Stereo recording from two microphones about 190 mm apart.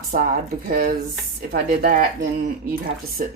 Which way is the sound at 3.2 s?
45° right (ahead or behind).